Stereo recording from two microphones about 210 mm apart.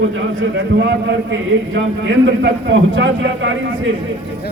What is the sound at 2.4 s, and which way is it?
A man's voice, 60° right (ahead or behind).